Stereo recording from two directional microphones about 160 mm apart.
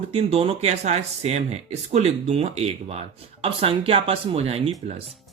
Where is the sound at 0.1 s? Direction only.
40° right (ahead or behind).